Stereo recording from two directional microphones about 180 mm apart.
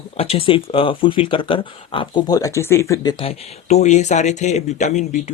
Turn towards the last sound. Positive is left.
turn(degrees=40)  # may be behind; listen again after turning